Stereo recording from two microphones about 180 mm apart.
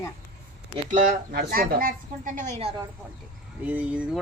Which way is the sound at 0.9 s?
45° right (ahead or behind).